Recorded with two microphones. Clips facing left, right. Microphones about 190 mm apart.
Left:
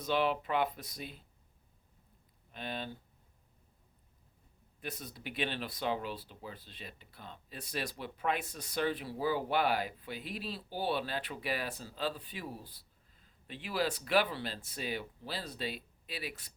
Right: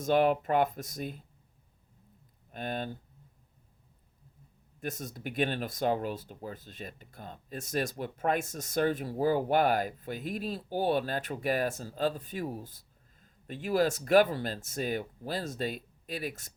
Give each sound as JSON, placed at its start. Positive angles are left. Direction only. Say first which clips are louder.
{"t": 0.0, "sound": "speech", "louder": "right 6 dB", "side_deg": -45}
{"t": 2.5, "sound": "speech", "louder": "right 5 dB", "side_deg": -45}
{"t": 4.8, "sound": "speech", "louder": "right 6 dB", "side_deg": -45}